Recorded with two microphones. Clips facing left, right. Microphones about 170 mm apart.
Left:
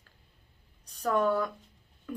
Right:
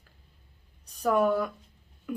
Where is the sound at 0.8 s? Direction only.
10° right (ahead or behind).